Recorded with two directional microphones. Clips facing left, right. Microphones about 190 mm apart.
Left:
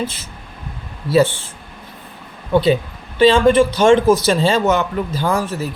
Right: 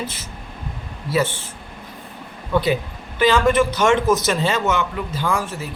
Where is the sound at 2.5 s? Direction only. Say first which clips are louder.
Left 5 dB; 25° left (ahead or behind).